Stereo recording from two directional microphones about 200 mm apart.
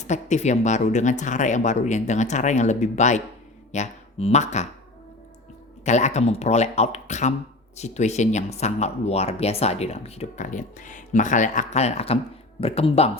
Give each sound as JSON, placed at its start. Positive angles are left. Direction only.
{"t": 0.1, "sound": "speech", "side_deg": 35}
{"t": 5.8, "sound": "speech", "side_deg": 35}